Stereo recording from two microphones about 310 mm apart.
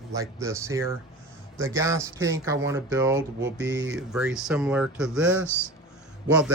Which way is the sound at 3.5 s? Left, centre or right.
Right.